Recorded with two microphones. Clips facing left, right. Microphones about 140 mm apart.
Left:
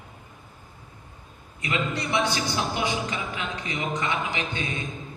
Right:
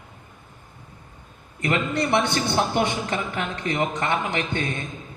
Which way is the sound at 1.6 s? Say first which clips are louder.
Right 5 dB; 55° right (ahead or behind).